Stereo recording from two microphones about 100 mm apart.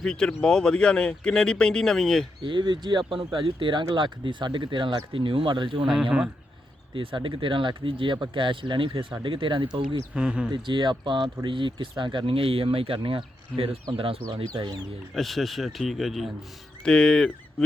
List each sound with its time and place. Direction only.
0.0 s speech: 10° left (ahead or behind)
2.4 s speech: 55° right (ahead or behind)
5.1 s speech: 65° right (ahead or behind)
5.8 s speech: 10° right (ahead or behind)
6.9 s speech: 60° right (ahead or behind)
10.2 s speech: 10° right (ahead or behind)
10.5 s speech: 50° right (ahead or behind)
15.1 s a man's voice: centre (ahead or behind)